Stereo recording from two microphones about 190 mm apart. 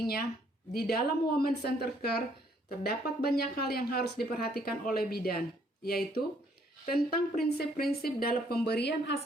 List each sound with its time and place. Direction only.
0.7 s a woman's voice: 55° left (ahead or behind)